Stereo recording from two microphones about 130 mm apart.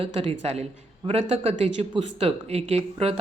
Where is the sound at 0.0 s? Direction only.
50° right (ahead or behind).